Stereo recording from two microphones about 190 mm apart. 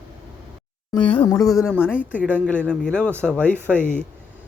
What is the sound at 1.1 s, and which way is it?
Speech, 15° left (ahead or behind).